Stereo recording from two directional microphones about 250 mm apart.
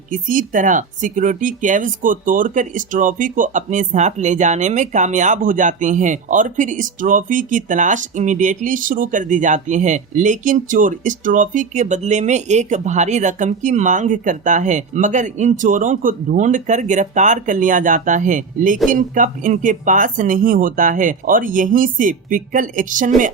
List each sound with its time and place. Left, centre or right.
0.1 s speech: right